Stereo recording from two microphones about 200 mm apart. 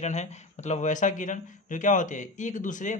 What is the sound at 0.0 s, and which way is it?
Speech, 35° left (ahead or behind).